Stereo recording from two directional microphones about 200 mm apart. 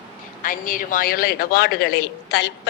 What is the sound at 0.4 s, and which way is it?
A woman's voice, 40° left (ahead or behind).